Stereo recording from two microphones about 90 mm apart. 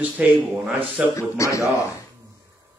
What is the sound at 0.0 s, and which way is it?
Speech, 15° right (ahead or behind).